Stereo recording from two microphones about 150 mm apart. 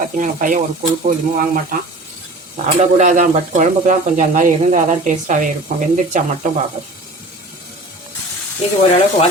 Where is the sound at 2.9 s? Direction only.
50° right (ahead or behind).